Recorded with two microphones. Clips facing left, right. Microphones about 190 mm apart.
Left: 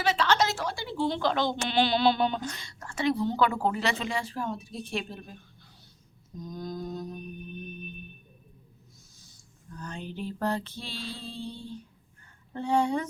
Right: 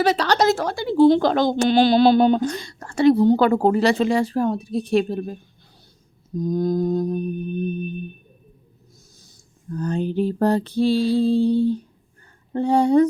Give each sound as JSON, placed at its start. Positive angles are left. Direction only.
{"t": 0.0, "sound": "a woman's voice", "side_deg": -40}
{"t": 6.4, "sound": "a woman's voice", "side_deg": -40}
{"t": 9.1, "sound": "a sound", "side_deg": -40}
{"t": 12.5, "sound": "a woman's voice", "side_deg": -35}